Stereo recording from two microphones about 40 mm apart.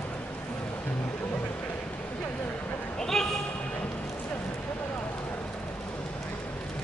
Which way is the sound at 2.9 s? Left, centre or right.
Centre.